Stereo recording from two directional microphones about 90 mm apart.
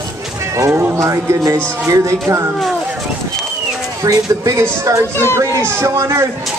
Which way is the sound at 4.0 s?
40° right (ahead or behind).